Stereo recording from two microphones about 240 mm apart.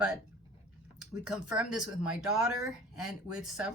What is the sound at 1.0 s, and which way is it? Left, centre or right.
Speech, centre.